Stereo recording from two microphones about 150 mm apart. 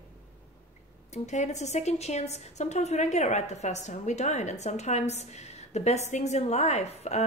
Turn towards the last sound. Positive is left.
turn(degrees=45)  # may be behind; listen again after turning